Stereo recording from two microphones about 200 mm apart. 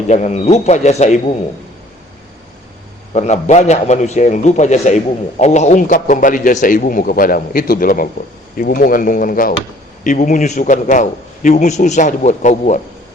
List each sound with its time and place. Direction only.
0.1 s a man's voice: 35° left (ahead or behind)
3.1 s a man's voice: 35° left (ahead or behind)